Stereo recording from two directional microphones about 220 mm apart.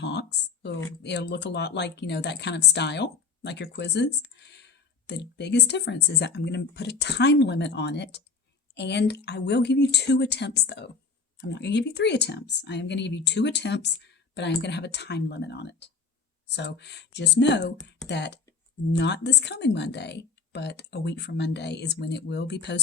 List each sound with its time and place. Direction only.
0.0 s a woman's voice: 50° left (ahead or behind)